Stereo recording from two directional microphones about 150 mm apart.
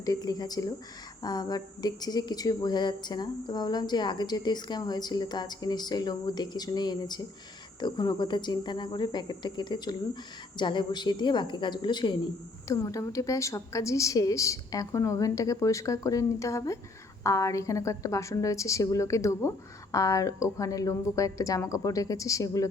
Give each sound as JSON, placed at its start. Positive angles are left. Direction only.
{"t": 0.0, "sound": "a woman's voice", "side_deg": 25}